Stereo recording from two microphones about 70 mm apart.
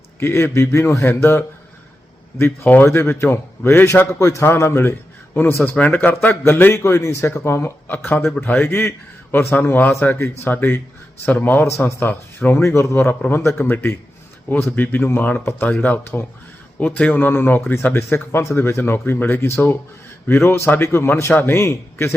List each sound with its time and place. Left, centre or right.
0.2 s a man's voice: left
4.2 s a man's voice: left